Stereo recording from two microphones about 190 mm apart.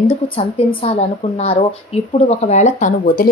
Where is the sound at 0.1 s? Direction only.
30° left (ahead or behind).